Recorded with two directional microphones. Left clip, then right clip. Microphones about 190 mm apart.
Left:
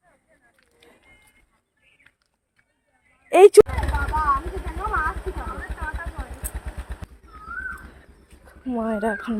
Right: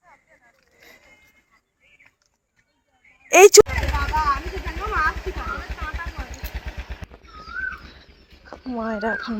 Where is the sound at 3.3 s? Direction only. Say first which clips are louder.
Right 1 dB; 10° left (ahead or behind).